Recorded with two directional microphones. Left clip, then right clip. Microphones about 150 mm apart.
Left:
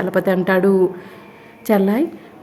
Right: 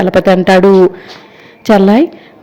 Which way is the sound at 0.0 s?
25° right (ahead or behind).